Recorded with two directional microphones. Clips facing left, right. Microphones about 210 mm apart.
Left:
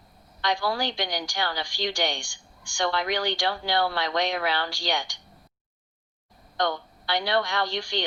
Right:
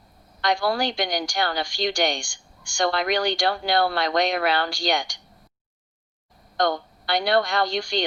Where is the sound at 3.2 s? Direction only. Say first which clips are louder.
Right 4 dB; 55° right (ahead or behind).